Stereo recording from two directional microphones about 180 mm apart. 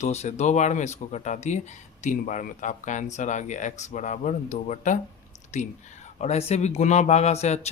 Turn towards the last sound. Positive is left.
turn(degrees=35)  # may be behind; listen again after turning